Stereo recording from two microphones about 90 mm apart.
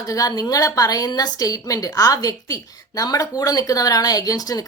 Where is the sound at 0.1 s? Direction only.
40° left (ahead or behind).